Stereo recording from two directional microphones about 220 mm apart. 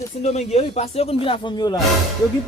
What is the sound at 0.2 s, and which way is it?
Speech, 30° left (ahead or behind).